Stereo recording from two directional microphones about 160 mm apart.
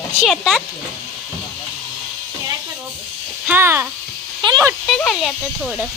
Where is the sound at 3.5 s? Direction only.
15° right (ahead or behind).